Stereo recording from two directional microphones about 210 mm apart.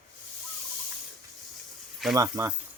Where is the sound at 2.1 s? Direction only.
15° right (ahead or behind).